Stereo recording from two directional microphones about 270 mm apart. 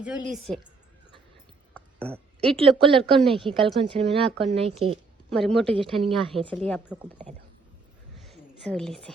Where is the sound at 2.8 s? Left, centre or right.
Centre.